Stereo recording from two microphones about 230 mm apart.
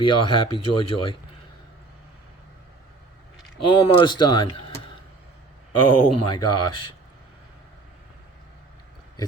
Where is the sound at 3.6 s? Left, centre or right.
Left.